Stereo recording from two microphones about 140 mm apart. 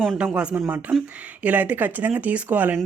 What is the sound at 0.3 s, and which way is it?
A woman's voice, 5° right (ahead or behind).